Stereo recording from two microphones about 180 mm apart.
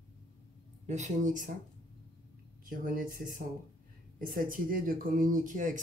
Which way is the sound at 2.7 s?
50° right (ahead or behind).